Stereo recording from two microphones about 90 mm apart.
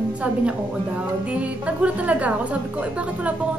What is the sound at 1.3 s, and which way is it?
Speech, 15° right (ahead or behind).